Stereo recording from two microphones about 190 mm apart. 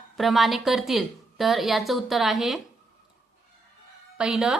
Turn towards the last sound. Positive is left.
turn(degrees=-5)  # may be behind; listen again after turning